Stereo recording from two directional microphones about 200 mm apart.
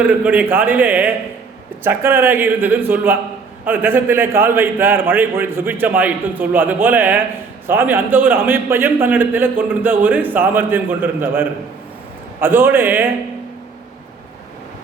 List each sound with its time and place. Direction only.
0.0 s a man's voice: 10° right (ahead or behind)